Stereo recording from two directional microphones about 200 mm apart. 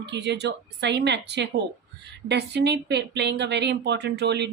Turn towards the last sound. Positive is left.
turn(degrees=-55)  # may be behind; listen again after turning